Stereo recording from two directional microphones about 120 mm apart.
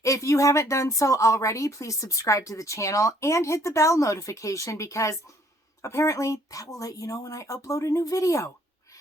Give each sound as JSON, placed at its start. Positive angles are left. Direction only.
{"t": 0.0, "sound": "speech", "side_deg": 25}